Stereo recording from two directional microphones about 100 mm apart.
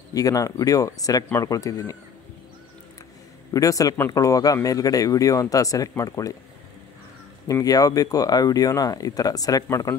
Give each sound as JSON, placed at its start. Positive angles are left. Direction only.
{"t": 0.1, "sound": "speech", "side_deg": 35}
{"t": 3.5, "sound": "speech", "side_deg": 35}
{"t": 7.4, "sound": "speech", "side_deg": 35}